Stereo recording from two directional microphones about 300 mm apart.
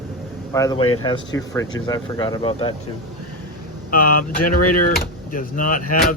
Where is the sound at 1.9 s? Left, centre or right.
Centre.